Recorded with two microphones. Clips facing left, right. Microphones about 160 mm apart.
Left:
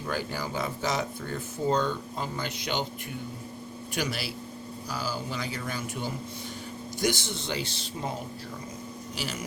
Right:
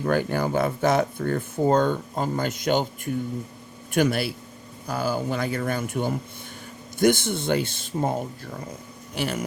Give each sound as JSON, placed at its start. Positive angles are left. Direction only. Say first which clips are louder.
{"t": 0.0, "sound": "speech", "louder": "right 9 dB", "side_deg": -55}
{"t": 9.1, "sound": "speech", "louder": "right 9 dB", "side_deg": -55}